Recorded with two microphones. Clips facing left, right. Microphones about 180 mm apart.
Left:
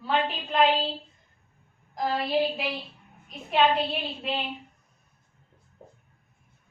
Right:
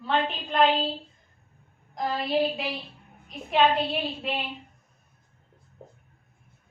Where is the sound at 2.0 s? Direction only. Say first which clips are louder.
Even; centre (ahead or behind).